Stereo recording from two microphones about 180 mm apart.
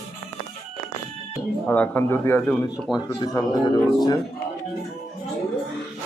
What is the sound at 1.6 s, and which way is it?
Speech, 10° left (ahead or behind).